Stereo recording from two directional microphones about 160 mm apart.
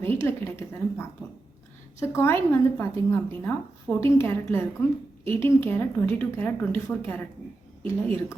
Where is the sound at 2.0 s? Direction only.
15° left (ahead or behind).